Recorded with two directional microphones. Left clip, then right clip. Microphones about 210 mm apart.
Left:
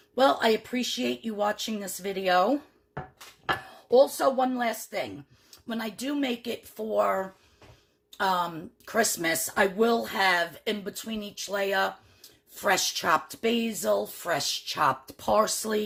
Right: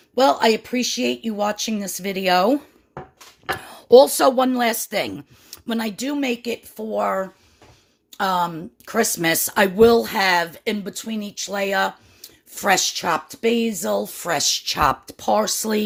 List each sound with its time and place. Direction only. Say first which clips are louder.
0.2 s speech: right 6 dB; 30° right (ahead or behind)
3.7 s speech: right 10 dB; 45° right (ahead or behind); by 15.1 s 30° right (ahead or behind)
15.2 s speech: right 4 dB; 20° right (ahead or behind)